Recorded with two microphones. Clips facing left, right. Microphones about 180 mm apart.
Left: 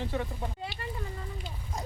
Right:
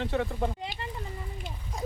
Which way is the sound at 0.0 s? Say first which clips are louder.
Right 4 dB; 70° right (ahead or behind).